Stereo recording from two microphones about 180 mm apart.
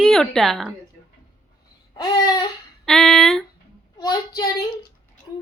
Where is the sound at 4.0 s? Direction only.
20° left (ahead or behind).